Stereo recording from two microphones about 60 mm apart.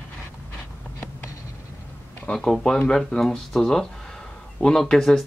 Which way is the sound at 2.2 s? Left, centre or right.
Centre.